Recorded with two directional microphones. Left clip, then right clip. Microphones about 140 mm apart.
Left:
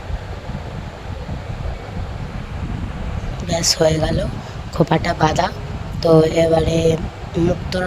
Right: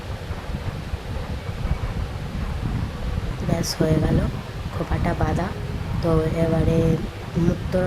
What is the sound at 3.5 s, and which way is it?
Speech, 50° left (ahead or behind).